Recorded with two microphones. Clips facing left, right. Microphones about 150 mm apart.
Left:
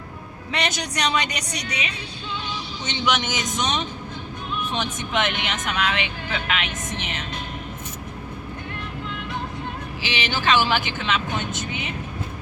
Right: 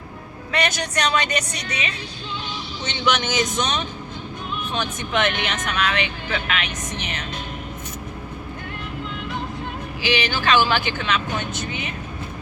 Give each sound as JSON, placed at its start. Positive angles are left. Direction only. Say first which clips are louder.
{"t": 0.5, "sound": "a woman's voice", "louder": "right 3 dB", "side_deg": 20}
{"t": 10.1, "sound": "speech", "louder": "right 2 dB", "side_deg": 20}